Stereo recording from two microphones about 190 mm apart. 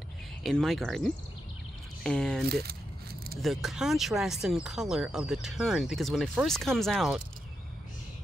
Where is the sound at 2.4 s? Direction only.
55° right (ahead or behind).